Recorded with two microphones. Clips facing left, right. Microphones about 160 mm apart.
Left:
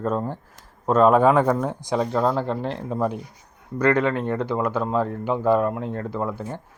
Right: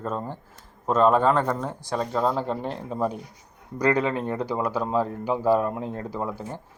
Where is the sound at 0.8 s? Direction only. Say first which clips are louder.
Left 3 dB; 10° left (ahead or behind).